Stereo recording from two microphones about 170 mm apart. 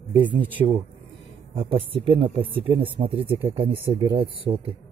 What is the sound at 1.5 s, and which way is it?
Speech, 35° right (ahead or behind).